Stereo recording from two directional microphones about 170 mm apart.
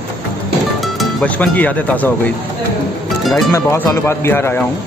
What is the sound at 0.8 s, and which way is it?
Speech, centre (ahead or behind).